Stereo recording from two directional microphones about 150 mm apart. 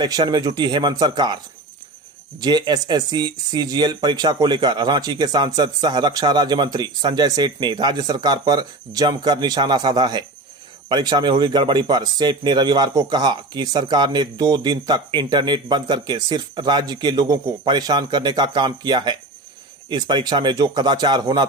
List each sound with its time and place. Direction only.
0.0 s speech: 25° right (ahead or behind)
2.4 s speech: 30° right (ahead or behind)